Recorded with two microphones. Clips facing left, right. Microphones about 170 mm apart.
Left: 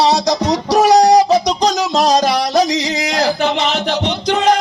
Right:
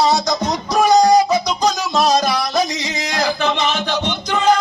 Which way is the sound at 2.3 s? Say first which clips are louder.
Left 5 dB; 80° left.